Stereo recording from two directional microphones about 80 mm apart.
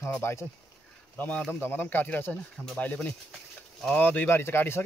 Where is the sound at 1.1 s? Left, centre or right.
Left.